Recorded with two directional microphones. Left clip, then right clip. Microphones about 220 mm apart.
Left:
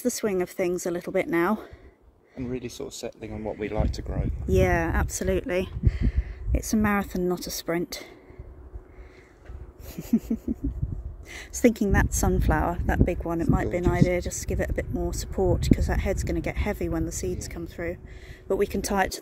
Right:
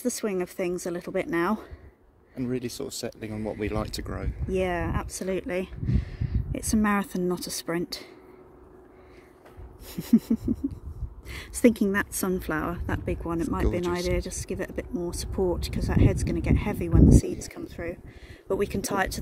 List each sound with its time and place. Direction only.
0.0 s speech: 15° left (ahead or behind)
2.3 s speech: 50° right (ahead or behind)
4.5 s speech: 15° left (ahead or behind)
9.8 s a sound: 10° right (ahead or behind)
11.2 s speech: centre (ahead or behind)